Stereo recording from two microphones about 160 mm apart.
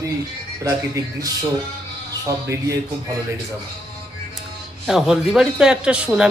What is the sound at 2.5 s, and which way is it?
Speech, 20° right (ahead or behind).